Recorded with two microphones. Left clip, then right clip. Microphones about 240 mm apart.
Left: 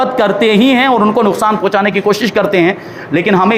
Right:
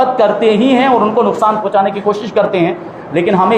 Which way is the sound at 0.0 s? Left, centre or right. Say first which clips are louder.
Right 1 dB; left.